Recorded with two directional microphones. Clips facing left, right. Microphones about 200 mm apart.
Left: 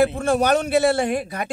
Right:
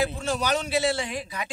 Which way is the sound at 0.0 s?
55° left (ahead or behind).